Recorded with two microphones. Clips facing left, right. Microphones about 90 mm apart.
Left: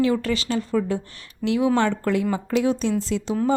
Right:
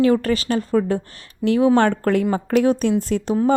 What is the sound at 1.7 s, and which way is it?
A woman's voice, 55° right (ahead or behind).